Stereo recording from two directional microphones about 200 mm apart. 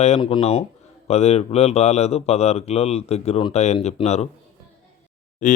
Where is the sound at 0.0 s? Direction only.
30° left (ahead or behind).